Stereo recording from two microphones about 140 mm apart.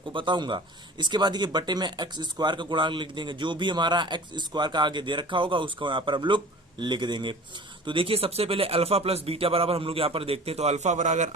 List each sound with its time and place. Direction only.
0.1 s speech: 35° right (ahead or behind); by 11.3 s 60° right (ahead or behind)